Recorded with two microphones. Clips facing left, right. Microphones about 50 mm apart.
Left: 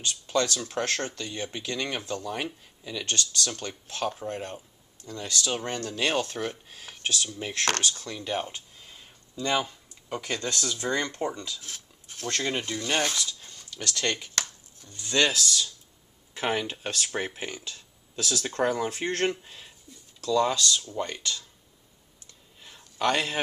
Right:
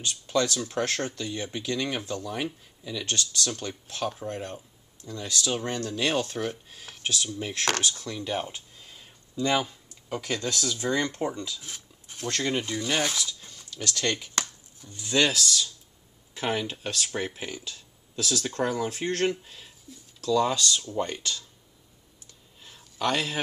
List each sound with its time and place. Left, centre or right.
0.0 s speech: centre
0.6 s speech: centre
3.1 s speech: centre
14.8 s speech: centre
15.2 s speech: centre
17.6 s a sound: centre
18.5 s speech: centre
22.6 s a sound: centre